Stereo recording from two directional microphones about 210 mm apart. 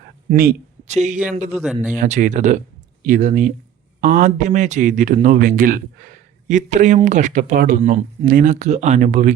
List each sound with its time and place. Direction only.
0.3 s a man's voice: 40° right (ahead or behind)
1.5 s speech: 5° right (ahead or behind)
2.0 s speech: 35° right (ahead or behind)